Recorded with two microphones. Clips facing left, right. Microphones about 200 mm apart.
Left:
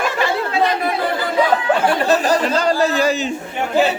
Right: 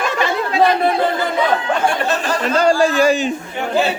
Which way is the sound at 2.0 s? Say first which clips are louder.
Left 4 dB; 40° left (ahead or behind).